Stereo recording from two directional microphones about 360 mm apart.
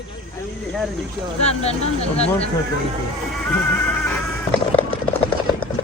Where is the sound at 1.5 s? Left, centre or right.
Centre.